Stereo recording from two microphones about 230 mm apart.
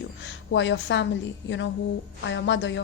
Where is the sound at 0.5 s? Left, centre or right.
Left.